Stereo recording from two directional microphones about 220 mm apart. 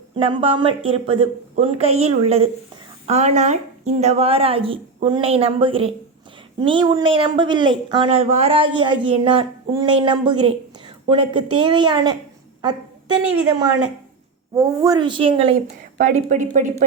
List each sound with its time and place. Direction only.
0.2 s speech: 25° right (ahead or behind)
14.5 s speech: 15° right (ahead or behind); by 16.7 s 35° right (ahead or behind)